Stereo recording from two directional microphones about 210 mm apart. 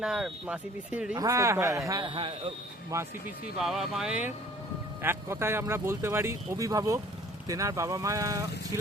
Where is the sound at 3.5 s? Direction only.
Centre (ahead or behind).